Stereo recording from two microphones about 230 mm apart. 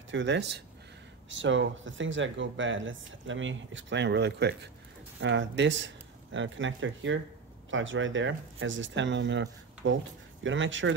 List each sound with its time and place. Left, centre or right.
0.1 s speech: right